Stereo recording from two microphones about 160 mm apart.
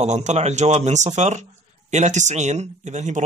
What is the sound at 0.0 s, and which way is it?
Speech, 45° right (ahead or behind).